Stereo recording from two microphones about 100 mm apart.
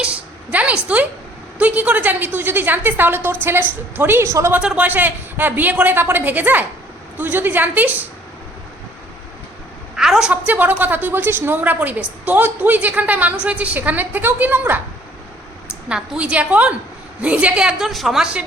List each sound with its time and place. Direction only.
0.0 s a sound: 10° right (ahead or behind)
1.5 s a woman's voice: 15° right (ahead or behind)
4.6 s a woman's voice: 10° right (ahead or behind)
9.9 s a sound: 5° right (ahead or behind)
10.4 s a woman's voice: 15° right (ahead or behind)
15.9 s a woman's voice: 10° right (ahead or behind)